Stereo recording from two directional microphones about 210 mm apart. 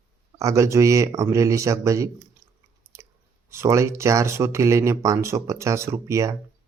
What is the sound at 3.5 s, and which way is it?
Speech, 15° right (ahead or behind).